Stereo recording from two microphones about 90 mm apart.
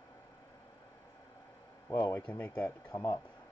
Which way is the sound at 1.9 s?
30° left (ahead or behind).